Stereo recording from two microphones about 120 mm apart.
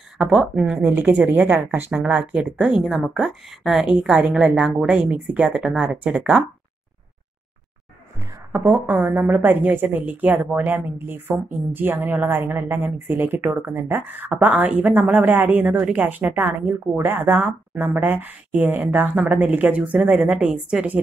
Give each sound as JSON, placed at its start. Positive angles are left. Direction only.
{"t": 0.2, "sound": "speech", "side_deg": -5}
{"t": 0.8, "sound": "a woman's voice", "side_deg": -20}
{"t": 8.5, "sound": "a woman's voice", "side_deg": -15}